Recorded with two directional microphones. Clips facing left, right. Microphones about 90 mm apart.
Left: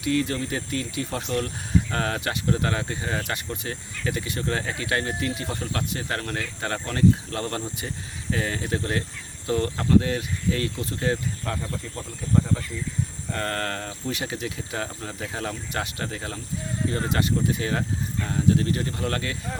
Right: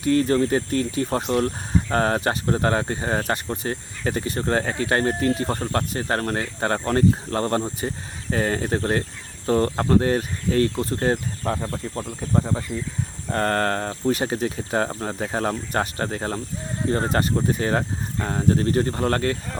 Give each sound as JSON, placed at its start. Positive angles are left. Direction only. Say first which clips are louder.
{"t": 0.0, "sound": "speech", "louder": "right 6 dB", "side_deg": -40}